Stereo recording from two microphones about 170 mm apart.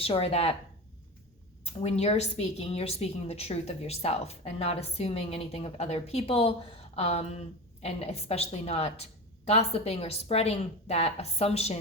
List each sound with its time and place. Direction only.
0.0 s a woman's voice: 35° left (ahead or behind)
1.6 s a woman's voice: 40° left (ahead or behind)